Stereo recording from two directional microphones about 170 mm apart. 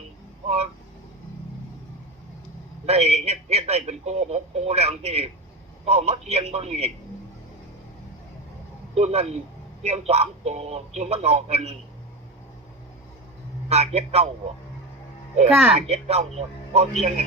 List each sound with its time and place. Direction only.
0.4 s speech: 35° right (ahead or behind)
2.8 s speech: 40° right (ahead or behind)
9.0 s speech: 40° right (ahead or behind)
13.7 s speech: 40° right (ahead or behind)
15.7 s speech: 40° right (ahead or behind)